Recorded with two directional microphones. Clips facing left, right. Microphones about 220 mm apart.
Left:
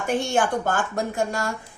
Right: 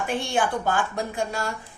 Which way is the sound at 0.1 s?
45° left (ahead or behind).